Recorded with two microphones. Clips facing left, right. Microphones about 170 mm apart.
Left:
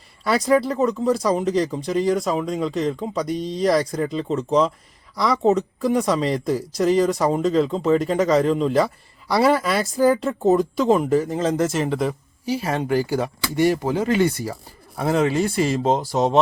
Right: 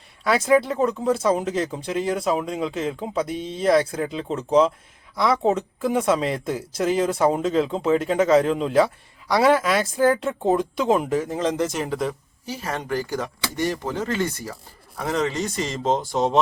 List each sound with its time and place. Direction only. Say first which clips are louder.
0.3 s speech: even; centre (ahead or behind)
12.5 s speech: left 6 dB; 15° left (ahead or behind)